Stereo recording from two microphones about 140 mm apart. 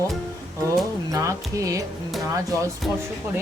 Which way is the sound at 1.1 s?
25° right (ahead or behind).